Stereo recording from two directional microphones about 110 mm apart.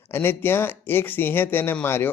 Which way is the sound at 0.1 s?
20° left (ahead or behind).